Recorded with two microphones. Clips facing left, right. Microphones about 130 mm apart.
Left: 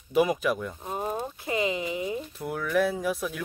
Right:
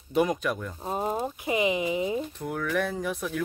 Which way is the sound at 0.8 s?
20° right (ahead or behind).